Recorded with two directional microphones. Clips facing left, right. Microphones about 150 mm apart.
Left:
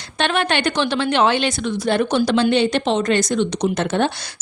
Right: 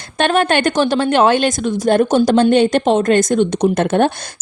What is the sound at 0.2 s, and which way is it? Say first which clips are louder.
Speech: right 5 dB; 45° right (ahead or behind).